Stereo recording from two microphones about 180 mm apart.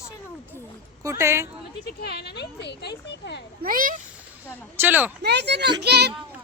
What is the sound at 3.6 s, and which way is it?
Speech, 50° right (ahead or behind).